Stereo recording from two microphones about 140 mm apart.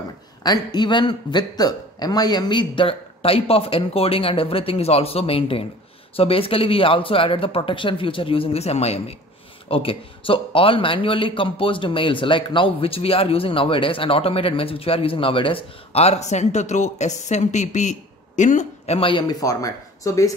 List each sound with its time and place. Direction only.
0.4 s a man's voice: 30° left (ahead or behind); by 18.9 s 60° left (ahead or behind)
18.9 s speech: 35° left (ahead or behind)